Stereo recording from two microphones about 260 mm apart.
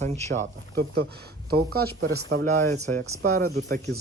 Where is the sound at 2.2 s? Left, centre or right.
Right.